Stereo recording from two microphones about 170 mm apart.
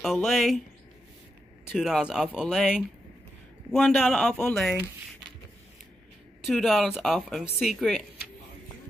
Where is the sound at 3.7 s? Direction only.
Centre (ahead or behind).